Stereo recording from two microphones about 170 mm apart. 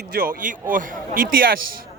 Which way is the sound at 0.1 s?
55° right (ahead or behind).